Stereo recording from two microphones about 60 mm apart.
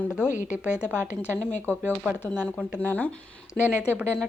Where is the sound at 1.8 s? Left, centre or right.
Right.